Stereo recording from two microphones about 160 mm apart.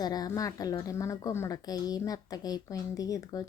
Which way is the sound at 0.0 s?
25° left (ahead or behind).